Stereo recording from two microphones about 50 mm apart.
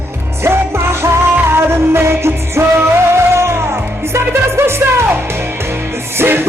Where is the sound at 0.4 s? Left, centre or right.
Right.